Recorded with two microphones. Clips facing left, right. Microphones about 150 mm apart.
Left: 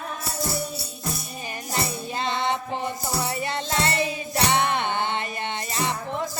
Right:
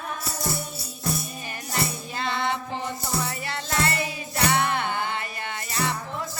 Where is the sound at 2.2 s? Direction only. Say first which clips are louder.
Left 1 dB; 20° left (ahead or behind).